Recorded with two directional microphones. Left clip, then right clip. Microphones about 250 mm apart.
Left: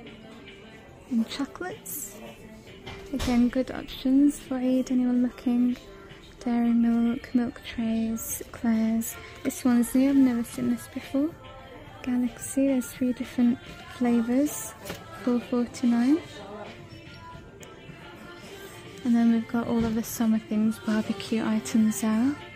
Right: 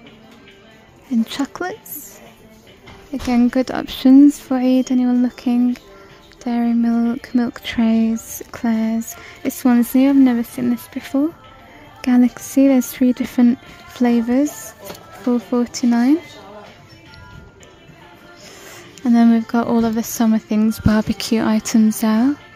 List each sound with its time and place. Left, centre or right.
1.3 s speech: centre
3.3 s a woman's voice: centre
15.5 s speech: centre
19.0 s a woman's voice: centre